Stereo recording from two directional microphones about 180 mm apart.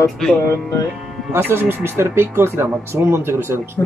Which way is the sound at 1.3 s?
10° right (ahead or behind).